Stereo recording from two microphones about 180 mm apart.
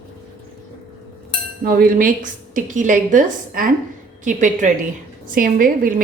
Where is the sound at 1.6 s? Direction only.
50° right (ahead or behind).